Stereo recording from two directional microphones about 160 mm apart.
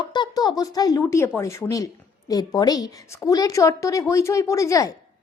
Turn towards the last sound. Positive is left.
turn(degrees=20)  # may be behind; listen again after turning